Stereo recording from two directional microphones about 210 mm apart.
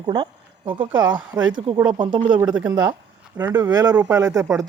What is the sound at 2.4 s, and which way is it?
Speech, 5° right (ahead or behind).